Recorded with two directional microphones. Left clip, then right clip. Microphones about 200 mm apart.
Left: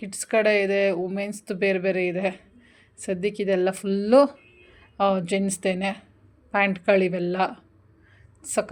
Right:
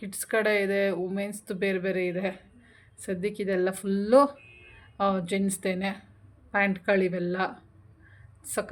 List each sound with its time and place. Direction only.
0.0 s speech: 15° left (ahead or behind)